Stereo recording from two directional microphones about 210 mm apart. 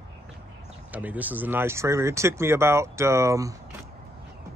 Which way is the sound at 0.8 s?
5° right (ahead or behind).